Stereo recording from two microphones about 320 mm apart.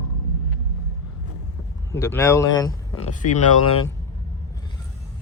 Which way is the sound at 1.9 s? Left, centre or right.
Centre.